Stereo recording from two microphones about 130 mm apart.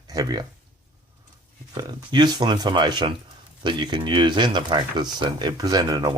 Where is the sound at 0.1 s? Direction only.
30° right (ahead or behind).